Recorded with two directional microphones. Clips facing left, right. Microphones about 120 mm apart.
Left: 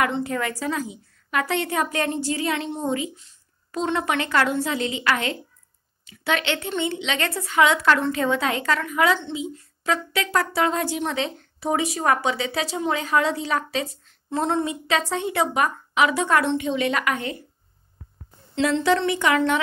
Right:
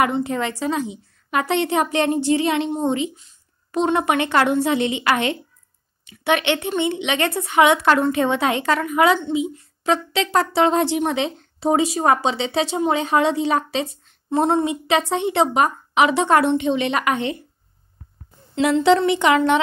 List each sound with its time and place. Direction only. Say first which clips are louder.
0.0 s a woman's voice: right 3 dB; 20° right (ahead or behind)
9.8 s speech: right 4 dB; 25° right (ahead or behind)
18.5 s speech: right 5 dB; 15° right (ahead or behind)